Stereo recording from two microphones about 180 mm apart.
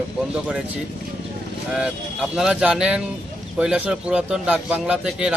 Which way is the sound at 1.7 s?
5° right (ahead or behind).